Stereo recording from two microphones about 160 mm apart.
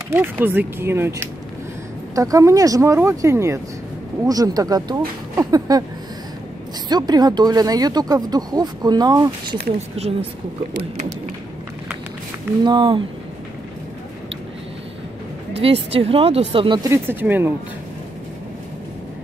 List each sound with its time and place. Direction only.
0.1 s speech: 10° right (ahead or behind)
6.9 s speech: 25° right (ahead or behind)
12.6 s speech: 30° right (ahead or behind)
15.6 s speech: 35° right (ahead or behind)
16.9 s speech: 15° right (ahead or behind)